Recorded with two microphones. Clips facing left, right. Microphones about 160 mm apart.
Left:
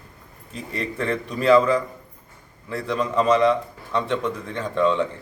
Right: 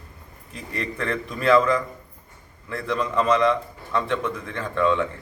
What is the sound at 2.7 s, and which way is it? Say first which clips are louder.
A man's voice: left 1 dB; 10° left (ahead or behind).